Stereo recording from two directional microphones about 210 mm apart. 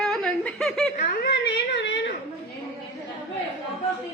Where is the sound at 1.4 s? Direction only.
55° left (ahead or behind).